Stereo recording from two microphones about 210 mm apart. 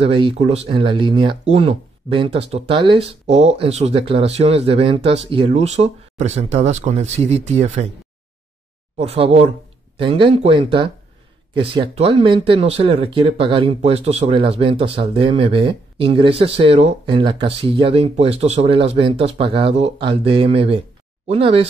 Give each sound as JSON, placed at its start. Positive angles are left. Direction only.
{"t": 0.0, "sound": "speech", "side_deg": -25}
{"t": 8.9, "sound": "speech", "side_deg": -30}